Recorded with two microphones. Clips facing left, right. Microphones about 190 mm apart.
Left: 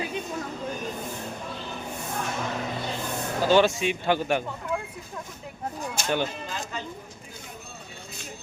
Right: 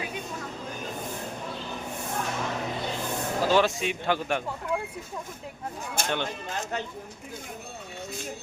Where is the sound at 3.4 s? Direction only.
Centre (ahead or behind).